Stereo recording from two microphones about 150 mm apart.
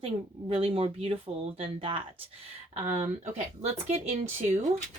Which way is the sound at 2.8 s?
50° right (ahead or behind).